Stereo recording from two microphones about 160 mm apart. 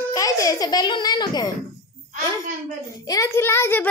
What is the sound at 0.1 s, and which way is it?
A child's voice, 20° left (ahead or behind).